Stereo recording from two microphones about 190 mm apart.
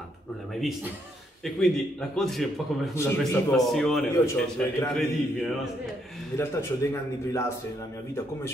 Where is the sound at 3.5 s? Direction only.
Centre (ahead or behind).